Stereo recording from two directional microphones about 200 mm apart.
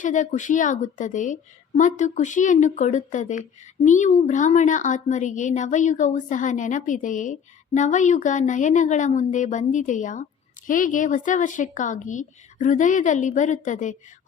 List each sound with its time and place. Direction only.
0.0 s a woman's voice: 40° left (ahead or behind)